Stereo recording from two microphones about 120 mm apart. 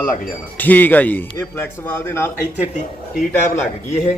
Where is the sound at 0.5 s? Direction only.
15° left (ahead or behind).